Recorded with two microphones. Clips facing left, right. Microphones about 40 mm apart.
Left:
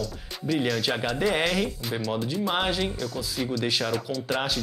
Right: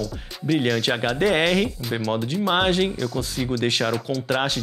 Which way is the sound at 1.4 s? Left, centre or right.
Centre.